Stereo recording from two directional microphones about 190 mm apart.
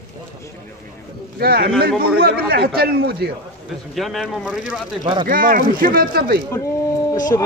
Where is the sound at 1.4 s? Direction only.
55° right (ahead or behind).